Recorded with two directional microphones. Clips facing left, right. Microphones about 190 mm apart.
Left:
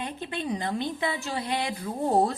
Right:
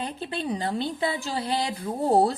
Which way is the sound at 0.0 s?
35° right (ahead or behind).